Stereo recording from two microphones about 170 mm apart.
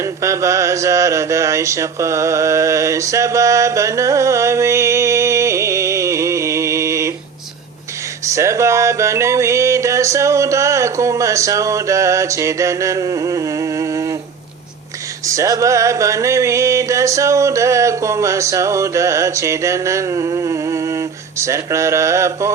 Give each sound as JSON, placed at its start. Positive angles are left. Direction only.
{"t": 0.0, "sound": "music", "side_deg": -15}
{"t": 8.2, "sound": "music", "side_deg": -20}
{"t": 15.3, "sound": "music", "side_deg": -20}